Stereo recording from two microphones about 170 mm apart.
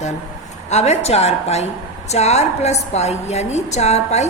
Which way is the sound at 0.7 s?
40° left (ahead or behind).